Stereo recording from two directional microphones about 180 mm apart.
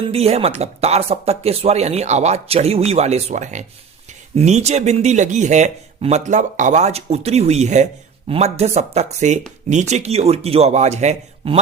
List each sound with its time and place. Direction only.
0.1 s speech: 35° right (ahead or behind)